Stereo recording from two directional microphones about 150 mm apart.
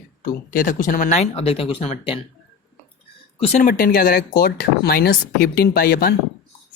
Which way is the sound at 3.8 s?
75° left (ahead or behind).